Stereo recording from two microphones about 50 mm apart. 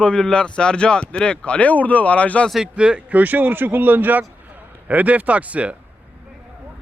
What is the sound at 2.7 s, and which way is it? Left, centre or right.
A man's voice, right.